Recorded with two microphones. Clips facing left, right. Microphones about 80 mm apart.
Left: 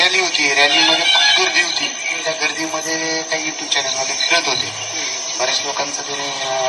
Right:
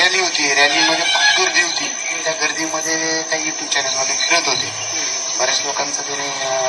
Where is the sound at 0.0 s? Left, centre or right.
Right.